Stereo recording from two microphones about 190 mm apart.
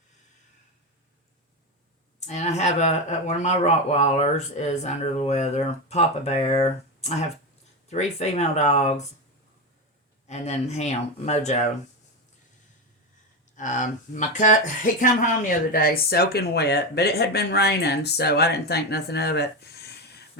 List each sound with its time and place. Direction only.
2.2 s speech: 35° left (ahead or behind)
10.2 s speech: 35° left (ahead or behind)
13.6 s speech: 40° left (ahead or behind); by 20.2 s 60° left (ahead or behind)